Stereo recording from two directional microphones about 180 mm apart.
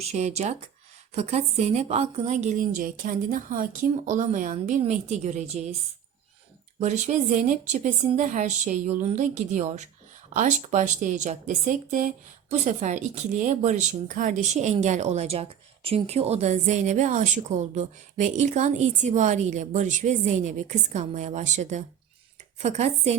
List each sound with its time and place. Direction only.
0.0 s speech: 35° right (ahead or behind)
6.7 s speech: 40° right (ahead or behind)